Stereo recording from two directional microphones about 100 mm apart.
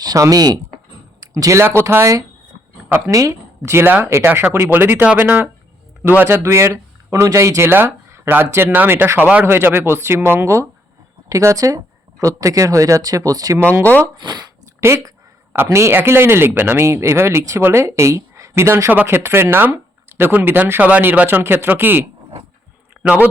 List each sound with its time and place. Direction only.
0.0 s a man's voice: 40° right (ahead or behind)
14.8 s speech: 30° right (ahead or behind)
23.0 s a man's voice: 15° right (ahead or behind)